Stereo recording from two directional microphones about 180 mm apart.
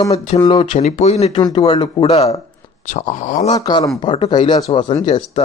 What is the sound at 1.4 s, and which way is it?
Speech, 25° left (ahead or behind).